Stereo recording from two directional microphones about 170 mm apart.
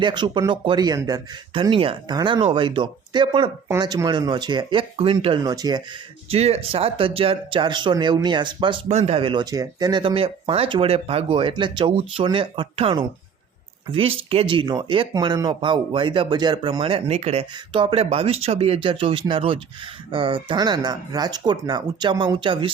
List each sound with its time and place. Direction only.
0.0 s speech: 25° right (ahead or behind)
6.3 s speech: 35° right (ahead or behind)